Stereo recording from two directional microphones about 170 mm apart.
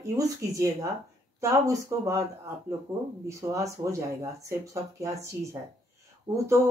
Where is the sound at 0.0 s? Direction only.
20° right (ahead or behind).